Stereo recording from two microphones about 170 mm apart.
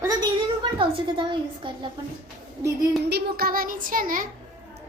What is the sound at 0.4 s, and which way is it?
A woman's voice, 30° right (ahead or behind).